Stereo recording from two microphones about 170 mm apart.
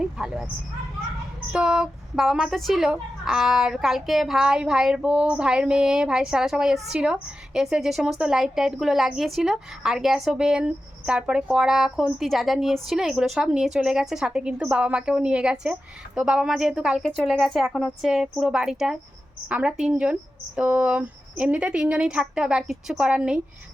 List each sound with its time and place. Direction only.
0.0 s speech: 5° right (ahead or behind)
1.5 s a woman's voice: 5° right (ahead or behind)